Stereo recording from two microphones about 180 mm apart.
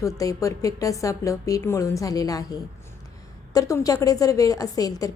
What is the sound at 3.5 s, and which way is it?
A woman's voice, 20° left (ahead or behind).